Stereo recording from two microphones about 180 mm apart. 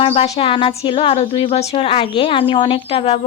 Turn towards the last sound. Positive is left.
turn(degrees=35)  # may be behind; listen again after turning